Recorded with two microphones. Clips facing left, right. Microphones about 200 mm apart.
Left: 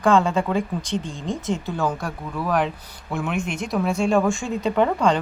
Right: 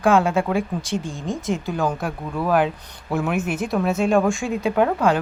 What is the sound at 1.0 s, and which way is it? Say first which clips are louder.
Speech: right 1 dB; 15° left (ahead or behind).